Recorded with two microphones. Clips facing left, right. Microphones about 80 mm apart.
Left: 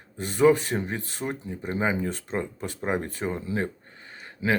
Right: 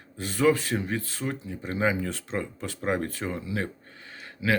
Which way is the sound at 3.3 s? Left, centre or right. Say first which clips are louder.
Left 6 dB; left.